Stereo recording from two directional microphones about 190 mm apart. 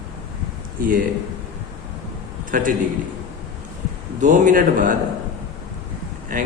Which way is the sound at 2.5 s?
45° right (ahead or behind).